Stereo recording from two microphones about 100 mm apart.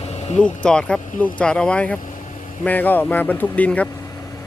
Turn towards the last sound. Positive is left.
turn(degrees=15)  # may be behind; listen again after turning